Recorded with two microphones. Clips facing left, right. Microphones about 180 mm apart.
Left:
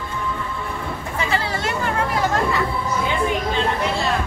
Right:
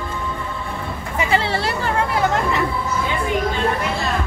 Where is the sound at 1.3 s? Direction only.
30° right (ahead or behind).